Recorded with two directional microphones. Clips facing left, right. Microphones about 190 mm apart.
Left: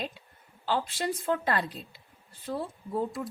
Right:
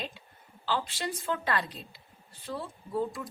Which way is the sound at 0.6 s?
50° left (ahead or behind).